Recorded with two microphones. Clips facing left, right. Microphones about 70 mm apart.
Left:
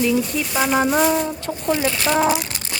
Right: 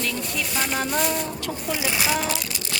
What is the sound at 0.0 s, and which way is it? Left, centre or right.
Speech, centre.